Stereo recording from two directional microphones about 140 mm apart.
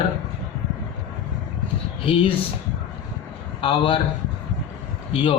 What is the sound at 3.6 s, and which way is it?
Speech, 35° left (ahead or behind).